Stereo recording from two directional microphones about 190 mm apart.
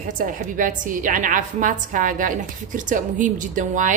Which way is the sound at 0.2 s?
45° right (ahead or behind).